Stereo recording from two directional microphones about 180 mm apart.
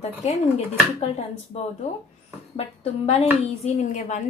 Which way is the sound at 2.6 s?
35° left (ahead or behind).